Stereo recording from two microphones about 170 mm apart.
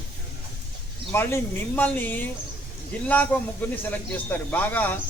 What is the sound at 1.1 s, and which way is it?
A man's voice, 15° left (ahead or behind).